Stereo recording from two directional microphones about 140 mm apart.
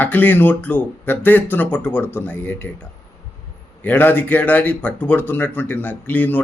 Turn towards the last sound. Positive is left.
turn(degrees=10)  # may be behind; listen again after turning